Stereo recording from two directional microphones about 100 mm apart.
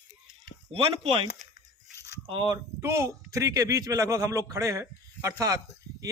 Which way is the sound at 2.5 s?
30° right (ahead or behind).